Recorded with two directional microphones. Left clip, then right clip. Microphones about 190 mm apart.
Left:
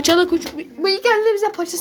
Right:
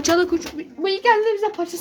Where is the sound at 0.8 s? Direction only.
10° right (ahead or behind).